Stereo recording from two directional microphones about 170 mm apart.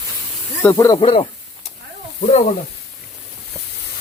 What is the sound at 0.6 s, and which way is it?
Speech, 15° left (ahead or behind).